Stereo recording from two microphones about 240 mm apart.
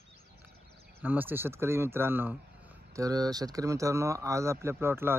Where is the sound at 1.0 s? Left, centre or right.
Centre.